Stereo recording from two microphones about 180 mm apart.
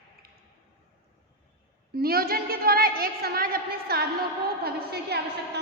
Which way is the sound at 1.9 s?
55° right (ahead or behind).